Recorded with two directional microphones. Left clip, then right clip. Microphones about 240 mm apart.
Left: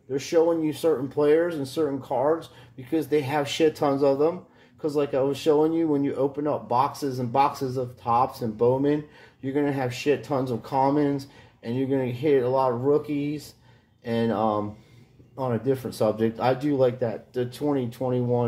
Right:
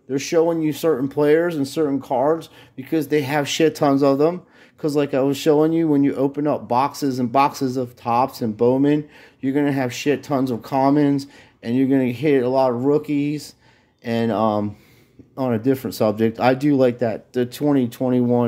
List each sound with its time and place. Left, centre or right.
0.1 s speech: right